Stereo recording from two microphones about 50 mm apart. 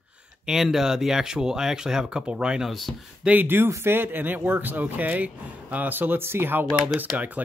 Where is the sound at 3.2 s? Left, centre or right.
Right.